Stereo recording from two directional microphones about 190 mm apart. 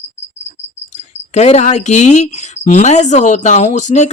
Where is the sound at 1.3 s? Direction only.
35° left (ahead or behind).